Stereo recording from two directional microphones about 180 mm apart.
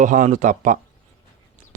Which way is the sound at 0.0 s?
45° right (ahead or behind).